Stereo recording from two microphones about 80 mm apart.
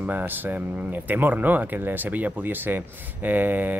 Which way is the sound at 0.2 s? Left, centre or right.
Right.